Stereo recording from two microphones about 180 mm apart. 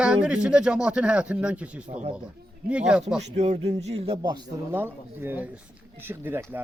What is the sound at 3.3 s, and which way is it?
Speech, 40° right (ahead or behind).